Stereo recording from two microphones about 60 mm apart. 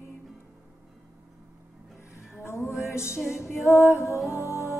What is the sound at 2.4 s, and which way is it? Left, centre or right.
Music, left.